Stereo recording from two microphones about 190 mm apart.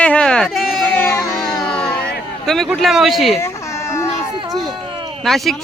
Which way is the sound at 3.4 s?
15° left (ahead or behind).